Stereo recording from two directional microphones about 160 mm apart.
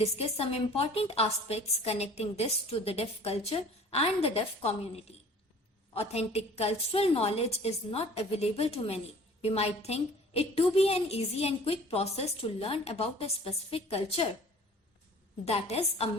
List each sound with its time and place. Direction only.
0.0 s a woman's voice: 40° left (ahead or behind)
5.9 s a woman's voice: 40° left (ahead or behind)
15.4 s a woman's voice: 40° left (ahead or behind)